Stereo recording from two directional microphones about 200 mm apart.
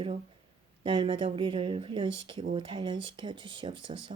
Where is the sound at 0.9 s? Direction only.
25° right (ahead or behind).